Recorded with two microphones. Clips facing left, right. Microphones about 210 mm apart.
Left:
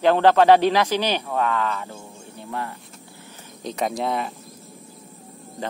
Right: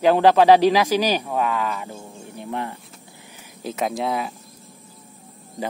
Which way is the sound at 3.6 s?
5° right (ahead or behind).